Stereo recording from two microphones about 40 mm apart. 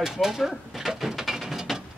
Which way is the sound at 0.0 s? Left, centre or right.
Centre.